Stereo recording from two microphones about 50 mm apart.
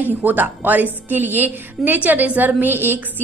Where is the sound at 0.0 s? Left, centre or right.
Right.